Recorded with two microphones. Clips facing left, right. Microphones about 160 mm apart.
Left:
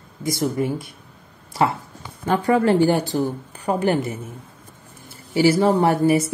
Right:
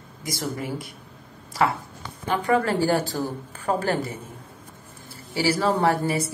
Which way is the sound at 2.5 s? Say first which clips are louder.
Left 5 dB; 30° left (ahead or behind).